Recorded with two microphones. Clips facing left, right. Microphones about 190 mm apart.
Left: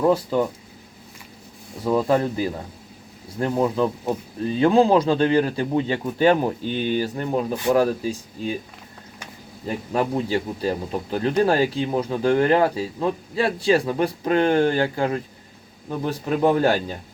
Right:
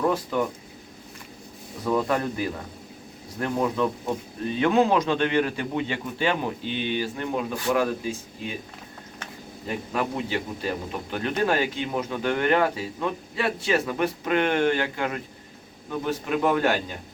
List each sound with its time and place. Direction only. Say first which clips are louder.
0.0 s a man's voice: left 5 dB; 30° left (ahead or behind)
1.8 s a man's voice: left 4 dB; 25° left (ahead or behind)
9.6 s a man's voice: left 4 dB; 35° left (ahead or behind)